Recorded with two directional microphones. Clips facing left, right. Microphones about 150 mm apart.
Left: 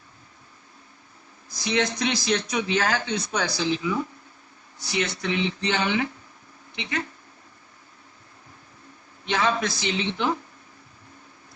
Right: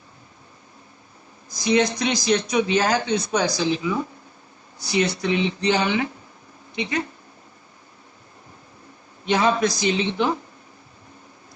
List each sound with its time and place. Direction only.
1.5 s speech: 20° right (ahead or behind)
4.8 s speech: 35° right (ahead or behind)
5.2 s speech: 20° right (ahead or behind)
5.6 s speech: 35° right (ahead or behind)
6.7 s speech: 20° right (ahead or behind)
9.3 s speech: 20° right (ahead or behind)